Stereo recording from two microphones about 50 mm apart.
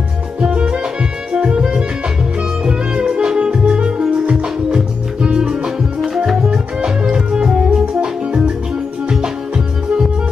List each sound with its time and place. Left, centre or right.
0.4 s music: right
5.9 s music: centre